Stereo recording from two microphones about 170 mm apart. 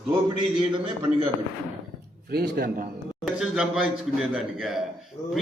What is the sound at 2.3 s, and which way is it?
Speech, 65° right (ahead or behind).